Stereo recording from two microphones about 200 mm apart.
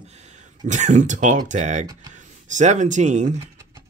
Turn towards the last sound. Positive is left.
turn(degrees=-35)  # may be behind; listen again after turning